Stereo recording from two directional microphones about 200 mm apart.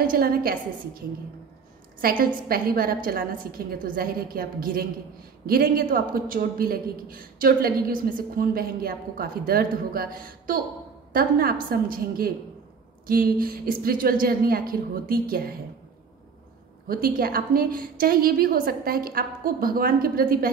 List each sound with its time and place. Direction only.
0.0 s a man's voice: 45° right (ahead or behind)
16.8 s a man's voice: 45° right (ahead or behind)